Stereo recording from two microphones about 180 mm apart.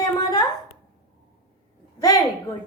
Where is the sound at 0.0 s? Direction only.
20° left (ahead or behind).